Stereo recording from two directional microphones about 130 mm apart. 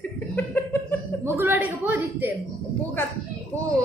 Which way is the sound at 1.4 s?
15° right (ahead or behind).